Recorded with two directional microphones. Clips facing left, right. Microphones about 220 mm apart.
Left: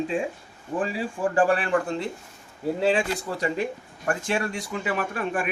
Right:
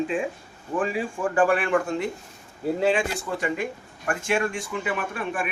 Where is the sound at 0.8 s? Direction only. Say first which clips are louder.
Even; 35° left (ahead or behind).